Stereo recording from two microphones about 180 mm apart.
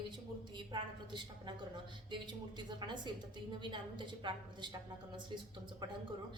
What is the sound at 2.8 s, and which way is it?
A woman's voice, 25° right (ahead or behind).